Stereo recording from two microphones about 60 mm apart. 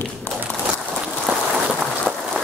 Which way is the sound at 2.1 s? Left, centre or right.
Right.